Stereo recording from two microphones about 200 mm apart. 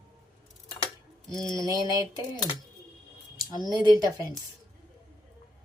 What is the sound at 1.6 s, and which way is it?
Speech, 15° right (ahead or behind).